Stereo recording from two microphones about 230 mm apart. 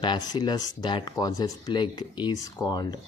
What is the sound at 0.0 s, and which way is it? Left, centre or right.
Speech, centre.